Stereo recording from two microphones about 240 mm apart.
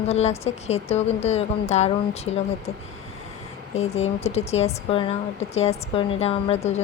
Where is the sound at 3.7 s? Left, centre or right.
Left.